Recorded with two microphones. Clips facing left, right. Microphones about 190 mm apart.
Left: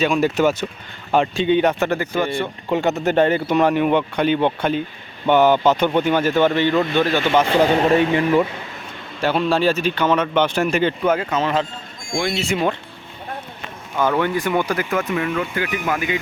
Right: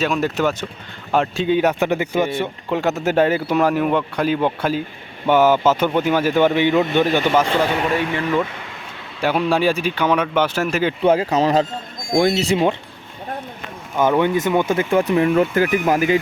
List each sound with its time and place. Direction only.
0.0 s a man's voice: centre (ahead or behind); by 7.3 s 15° right (ahead or behind)
7.8 s speech: 35° left (ahead or behind)
8.1 s speech: 10° left (ahead or behind)
9.2 s a man's voice: 10° right (ahead or behind)
11.0 s speech: 30° right (ahead or behind)
13.9 s speech: 15° right (ahead or behind); by 16.2 s 35° right (ahead or behind)